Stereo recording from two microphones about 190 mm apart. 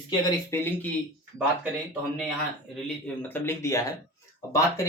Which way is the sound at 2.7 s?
10° left (ahead or behind).